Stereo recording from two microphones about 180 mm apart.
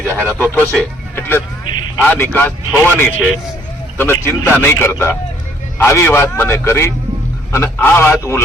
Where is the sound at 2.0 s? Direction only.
10° left (ahead or behind).